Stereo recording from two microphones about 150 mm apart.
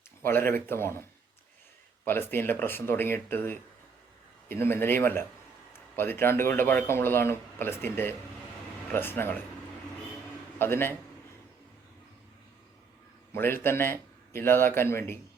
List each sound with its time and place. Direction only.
0.2 s a man's voice: 15° left (ahead or behind)
2.0 s a man's voice: 15° left (ahead or behind)
10.6 s a man's voice: 15° left (ahead or behind)
13.3 s a man's voice: 15° left (ahead or behind)